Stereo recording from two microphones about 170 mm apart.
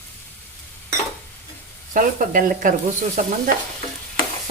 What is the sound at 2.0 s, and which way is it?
Stir, 55° right (ahead or behind).